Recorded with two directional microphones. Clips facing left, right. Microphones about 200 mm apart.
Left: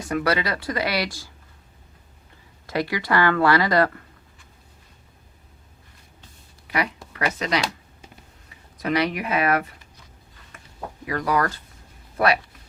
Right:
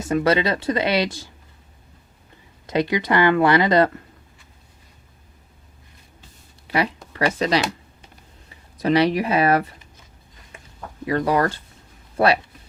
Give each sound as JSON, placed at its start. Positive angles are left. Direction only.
{"t": 0.0, "sound": "speech", "side_deg": -25}
{"t": 2.6, "sound": "speech", "side_deg": -20}
{"t": 6.7, "sound": "speech", "side_deg": -30}
{"t": 8.8, "sound": "speech", "side_deg": -30}
{"t": 11.0, "sound": "speech", "side_deg": -25}